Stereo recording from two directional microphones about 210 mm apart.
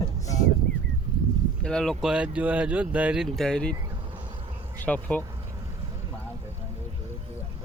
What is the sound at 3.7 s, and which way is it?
Insect, 20° right (ahead or behind).